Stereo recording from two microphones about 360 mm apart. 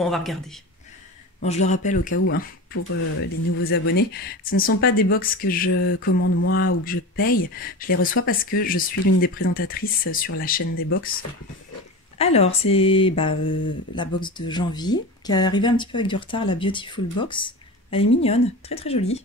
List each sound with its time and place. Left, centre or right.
0.0 s speech: centre
1.4 s speech: centre
2.1 s speech: left
12.2 s speech: centre